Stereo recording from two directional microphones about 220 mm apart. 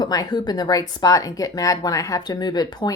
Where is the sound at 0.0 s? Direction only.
20° left (ahead or behind).